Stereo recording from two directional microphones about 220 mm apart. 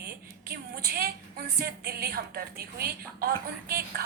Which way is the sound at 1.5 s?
45° right (ahead or behind).